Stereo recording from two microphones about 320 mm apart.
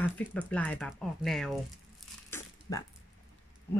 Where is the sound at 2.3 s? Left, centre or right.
Centre.